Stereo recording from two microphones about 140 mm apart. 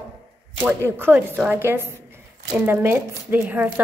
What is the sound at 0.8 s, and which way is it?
A woman's voice, 15° right (ahead or behind).